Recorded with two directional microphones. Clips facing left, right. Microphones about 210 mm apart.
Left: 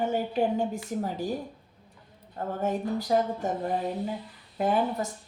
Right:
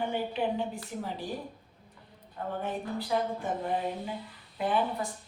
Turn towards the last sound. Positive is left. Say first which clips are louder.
# left 3 dB
turn(degrees=45)  # may be behind; listen again after turning